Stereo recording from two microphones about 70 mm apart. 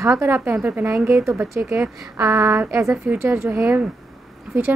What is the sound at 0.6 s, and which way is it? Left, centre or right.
Speech, centre.